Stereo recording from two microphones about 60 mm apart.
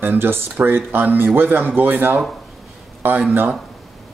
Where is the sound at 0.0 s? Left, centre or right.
Right.